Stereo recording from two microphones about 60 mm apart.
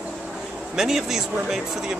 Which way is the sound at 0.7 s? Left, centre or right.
Centre.